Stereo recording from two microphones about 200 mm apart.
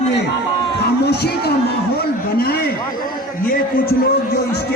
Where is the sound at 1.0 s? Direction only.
55° left (ahead or behind).